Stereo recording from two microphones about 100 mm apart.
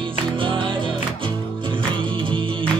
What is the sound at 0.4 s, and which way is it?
Music, 55° right (ahead or behind).